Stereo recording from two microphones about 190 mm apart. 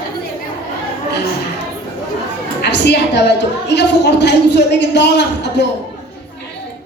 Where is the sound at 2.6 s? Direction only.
65° left (ahead or behind).